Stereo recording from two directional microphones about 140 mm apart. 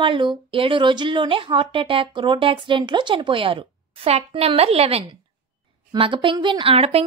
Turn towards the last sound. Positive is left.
turn(degrees=-45)  # may be behind; listen again after turning